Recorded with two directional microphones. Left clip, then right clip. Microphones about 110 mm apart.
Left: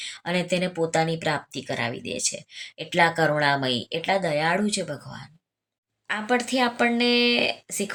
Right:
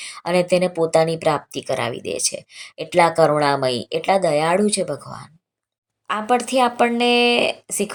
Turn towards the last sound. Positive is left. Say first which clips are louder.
# right 5 dB
turn(degrees=-30)  # may be behind; listen again after turning